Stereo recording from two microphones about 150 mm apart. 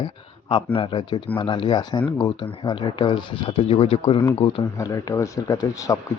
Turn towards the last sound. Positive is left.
turn(degrees=20)  # may be behind; listen again after turning